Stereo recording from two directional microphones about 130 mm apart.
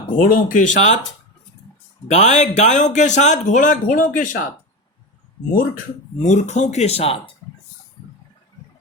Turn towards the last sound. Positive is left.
turn(degrees=50)  # may be behind; listen again after turning